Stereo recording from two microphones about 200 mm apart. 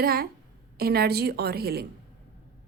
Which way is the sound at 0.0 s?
50° right (ahead or behind).